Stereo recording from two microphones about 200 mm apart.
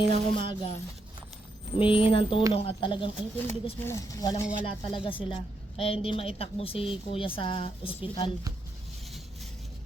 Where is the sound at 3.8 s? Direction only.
15° left (ahead or behind).